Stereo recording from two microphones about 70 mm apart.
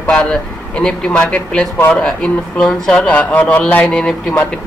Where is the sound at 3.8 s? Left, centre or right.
Centre.